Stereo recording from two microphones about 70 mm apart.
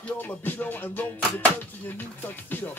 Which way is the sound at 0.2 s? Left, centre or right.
Left.